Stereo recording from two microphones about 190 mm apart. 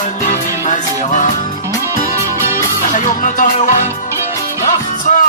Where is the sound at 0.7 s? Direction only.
40° left (ahead or behind).